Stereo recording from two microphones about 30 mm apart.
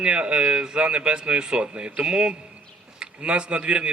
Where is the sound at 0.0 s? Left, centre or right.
Right.